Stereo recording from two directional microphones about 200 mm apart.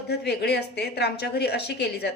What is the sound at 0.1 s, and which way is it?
A woman's voice, 55° left (ahead or behind).